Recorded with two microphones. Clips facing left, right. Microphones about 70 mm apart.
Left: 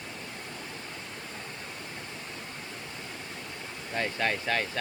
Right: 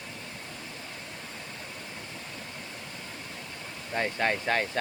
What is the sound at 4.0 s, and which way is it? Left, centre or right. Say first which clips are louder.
Speech: right 2 dB; right.